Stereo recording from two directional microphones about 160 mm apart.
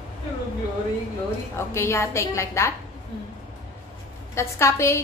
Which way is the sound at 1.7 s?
15° left (ahead or behind).